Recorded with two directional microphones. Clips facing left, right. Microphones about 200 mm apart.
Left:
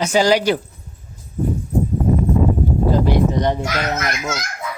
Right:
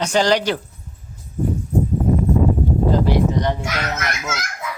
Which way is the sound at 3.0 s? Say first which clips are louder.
Left 1 dB; 20° left (ahead or behind).